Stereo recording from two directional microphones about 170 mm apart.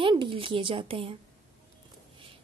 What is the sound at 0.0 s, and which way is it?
Speech, 30° right (ahead or behind).